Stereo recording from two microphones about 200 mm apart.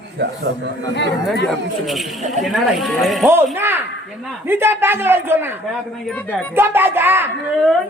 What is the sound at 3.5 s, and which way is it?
A man's voice, 10° right (ahead or behind).